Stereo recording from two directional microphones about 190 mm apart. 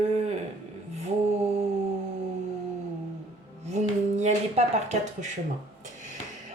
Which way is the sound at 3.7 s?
35° right (ahead or behind).